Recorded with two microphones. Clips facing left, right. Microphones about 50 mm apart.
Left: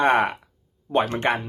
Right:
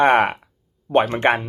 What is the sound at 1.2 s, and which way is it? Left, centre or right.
Speech, right.